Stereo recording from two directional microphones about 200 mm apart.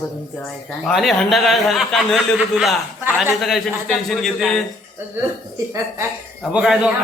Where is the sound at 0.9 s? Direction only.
Centre (ahead or behind).